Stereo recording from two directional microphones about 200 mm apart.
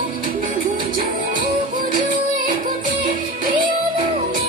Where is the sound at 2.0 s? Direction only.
40° right (ahead or behind).